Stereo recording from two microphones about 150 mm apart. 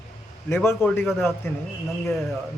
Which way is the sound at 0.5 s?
15° left (ahead or behind).